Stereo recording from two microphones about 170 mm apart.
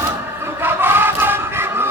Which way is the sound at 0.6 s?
15° right (ahead or behind).